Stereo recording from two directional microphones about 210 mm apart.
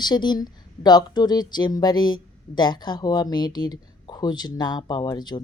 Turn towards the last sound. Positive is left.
turn(degrees=20)  # may be behind; listen again after turning